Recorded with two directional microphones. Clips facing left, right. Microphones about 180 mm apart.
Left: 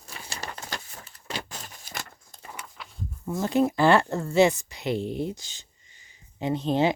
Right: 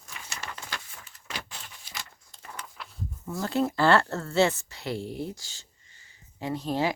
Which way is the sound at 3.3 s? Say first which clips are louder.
Left 4 dB; 20° left (ahead or behind).